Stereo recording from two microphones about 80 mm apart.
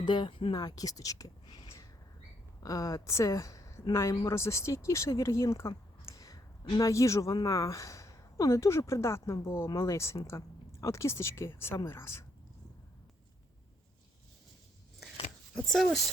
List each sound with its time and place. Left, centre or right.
0.0 s speech: left
15.5 s speech: centre